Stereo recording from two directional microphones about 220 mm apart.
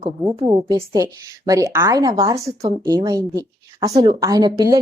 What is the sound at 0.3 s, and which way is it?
A woman's voice, 20° right (ahead or behind).